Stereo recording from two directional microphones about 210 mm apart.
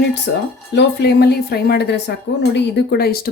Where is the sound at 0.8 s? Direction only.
50° left (ahead or behind).